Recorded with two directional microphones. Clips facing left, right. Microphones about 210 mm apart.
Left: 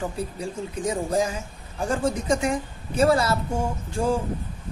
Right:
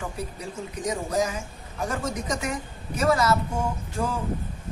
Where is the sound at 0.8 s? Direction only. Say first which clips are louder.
Left 2 dB; 30° left (ahead or behind).